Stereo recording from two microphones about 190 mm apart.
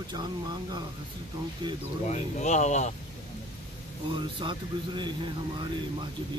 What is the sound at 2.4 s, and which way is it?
Speech, 40° left (ahead or behind).